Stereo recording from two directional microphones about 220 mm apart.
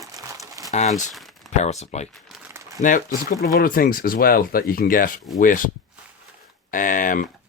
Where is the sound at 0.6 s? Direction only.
15° right (ahead or behind).